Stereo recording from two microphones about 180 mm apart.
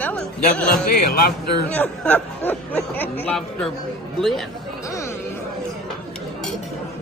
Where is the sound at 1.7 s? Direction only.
10° left (ahead or behind).